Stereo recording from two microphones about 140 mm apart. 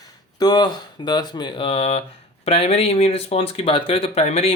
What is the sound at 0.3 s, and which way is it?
Speech, 30° left (ahead or behind).